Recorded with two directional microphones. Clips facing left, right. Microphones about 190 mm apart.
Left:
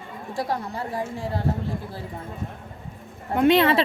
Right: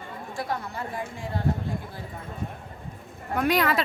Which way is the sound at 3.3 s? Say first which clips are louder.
Left 6 dB; 25° left (ahead or behind).